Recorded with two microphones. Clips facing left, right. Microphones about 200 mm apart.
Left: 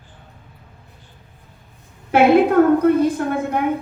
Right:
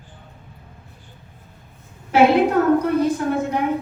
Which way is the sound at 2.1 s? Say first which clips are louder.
Left 2 dB; 55° left (ahead or behind).